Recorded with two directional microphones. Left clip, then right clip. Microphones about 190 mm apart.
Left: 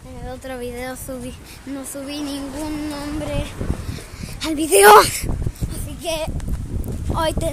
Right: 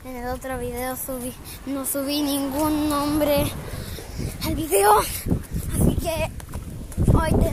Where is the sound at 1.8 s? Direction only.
15° right (ahead or behind).